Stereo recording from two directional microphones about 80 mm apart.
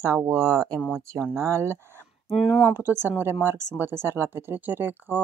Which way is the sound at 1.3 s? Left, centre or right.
Right.